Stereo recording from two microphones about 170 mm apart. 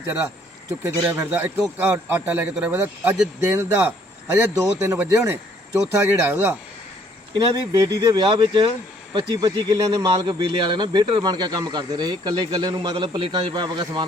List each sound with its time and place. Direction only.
0.8 s speech: 15° right (ahead or behind)